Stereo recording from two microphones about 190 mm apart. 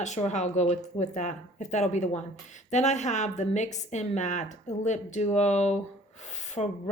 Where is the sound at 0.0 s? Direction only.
40° left (ahead or behind).